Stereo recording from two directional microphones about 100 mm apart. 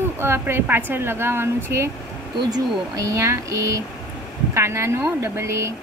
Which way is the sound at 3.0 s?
30° right (ahead or behind).